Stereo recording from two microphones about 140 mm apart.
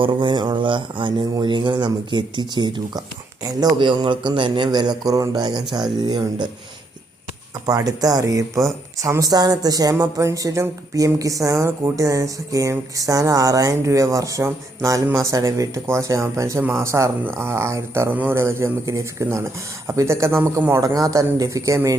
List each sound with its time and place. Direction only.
0.0 s a man's voice: 35° right (ahead or behind)
7.7 s speech: 25° right (ahead or behind)